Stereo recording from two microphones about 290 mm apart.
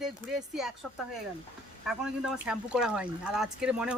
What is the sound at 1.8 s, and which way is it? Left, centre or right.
Speech, centre.